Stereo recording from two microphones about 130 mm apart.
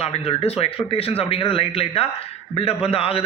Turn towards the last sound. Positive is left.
turn(degrees=45)  # may be behind; listen again after turning